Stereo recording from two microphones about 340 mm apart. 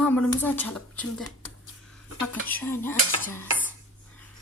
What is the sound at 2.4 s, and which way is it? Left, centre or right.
Speech, centre.